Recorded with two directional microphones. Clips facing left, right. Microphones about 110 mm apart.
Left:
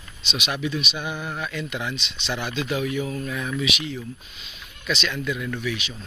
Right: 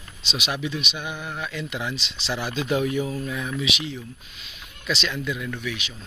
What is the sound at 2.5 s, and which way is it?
Speech, 40° right (ahead or behind).